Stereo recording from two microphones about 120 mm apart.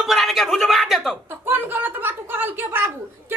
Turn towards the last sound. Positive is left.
turn(degrees=-15)  # may be behind; listen again after turning